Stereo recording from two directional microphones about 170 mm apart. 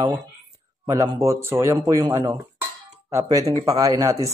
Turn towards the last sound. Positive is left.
turn(degrees=-20)  # may be behind; listen again after turning